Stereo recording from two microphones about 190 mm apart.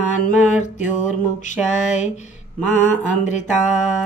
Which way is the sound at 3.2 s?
40° left (ahead or behind).